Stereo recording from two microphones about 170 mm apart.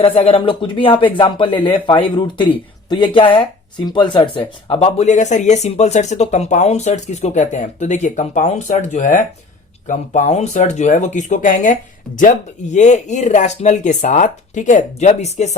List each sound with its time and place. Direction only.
0.0 s speech: 35° left (ahead or behind)